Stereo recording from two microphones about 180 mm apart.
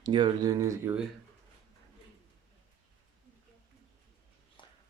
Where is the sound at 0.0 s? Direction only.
25° right (ahead or behind).